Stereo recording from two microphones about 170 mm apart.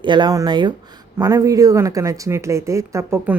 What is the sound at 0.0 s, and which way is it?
Speech, 25° right (ahead or behind).